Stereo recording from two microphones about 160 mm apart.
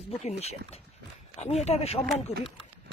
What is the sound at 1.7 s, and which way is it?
Speech, 40° left (ahead or behind).